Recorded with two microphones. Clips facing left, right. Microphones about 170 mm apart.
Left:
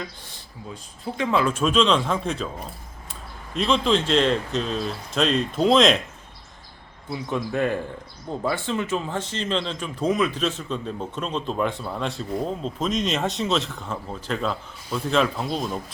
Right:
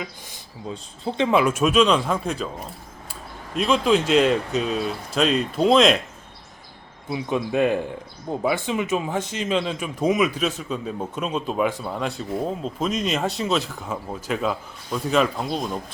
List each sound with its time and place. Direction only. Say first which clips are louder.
0.7 s speech: right 4 dB; 25° right (ahead or behind); by 2.5 s 5° right (ahead or behind)
3.5 s speech: right 2 dB; 5° right (ahead or behind)
7.1 s speech: right 3 dB; 20° right (ahead or behind); by 15.8 s centre (ahead or behind)